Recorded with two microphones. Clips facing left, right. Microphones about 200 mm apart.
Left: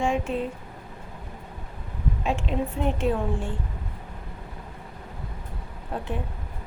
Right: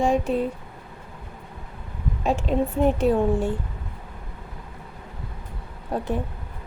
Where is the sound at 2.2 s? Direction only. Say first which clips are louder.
Right 5 dB; 40° right (ahead or behind).